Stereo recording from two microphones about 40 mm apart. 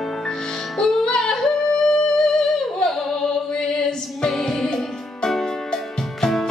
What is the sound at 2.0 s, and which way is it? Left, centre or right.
Music, left.